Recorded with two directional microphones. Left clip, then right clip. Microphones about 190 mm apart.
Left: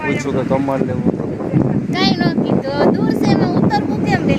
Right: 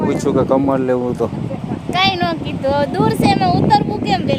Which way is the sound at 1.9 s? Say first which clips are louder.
Right 5 dB; 20° right (ahead or behind).